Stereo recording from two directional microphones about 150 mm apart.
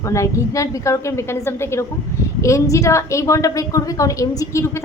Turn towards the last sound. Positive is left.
turn(degrees=20)  # may be behind; listen again after turning